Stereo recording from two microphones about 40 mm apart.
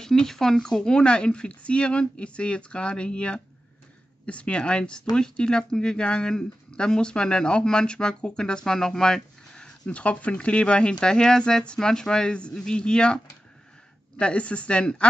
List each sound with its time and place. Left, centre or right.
0.0 s speech: centre
9.8 s speech: left